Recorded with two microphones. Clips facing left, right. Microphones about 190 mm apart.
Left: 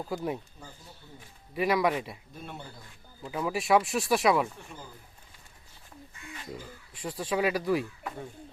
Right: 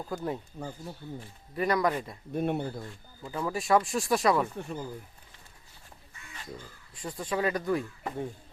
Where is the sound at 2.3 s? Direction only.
65° right (ahead or behind).